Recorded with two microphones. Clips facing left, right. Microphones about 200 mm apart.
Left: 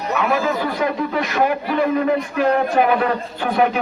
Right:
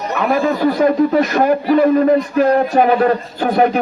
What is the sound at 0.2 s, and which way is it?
A man's voice, 40° right (ahead or behind).